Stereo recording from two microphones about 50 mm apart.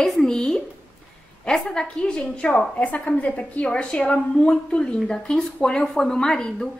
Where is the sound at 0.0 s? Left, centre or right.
Centre.